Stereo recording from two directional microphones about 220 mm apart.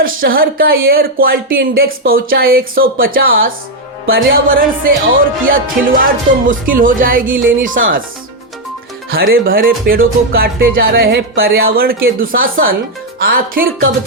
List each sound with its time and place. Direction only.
0.0 s music: 40° right (ahead or behind)
9.1 s music: 45° right (ahead or behind)